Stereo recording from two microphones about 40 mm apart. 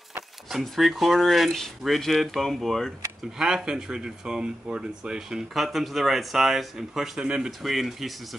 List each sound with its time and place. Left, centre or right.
0.5 s speech: centre
3.3 s speech: centre
5.5 s speech: centre
7.2 s speech: centre
7.6 s speech: centre